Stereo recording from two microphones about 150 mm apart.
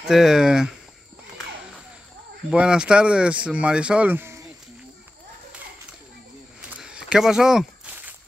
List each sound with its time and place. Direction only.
0.0 s speech: 5° right (ahead or behind)
2.5 s speech: 5° right (ahead or behind)
6.7 s walk: 5° right (ahead or behind)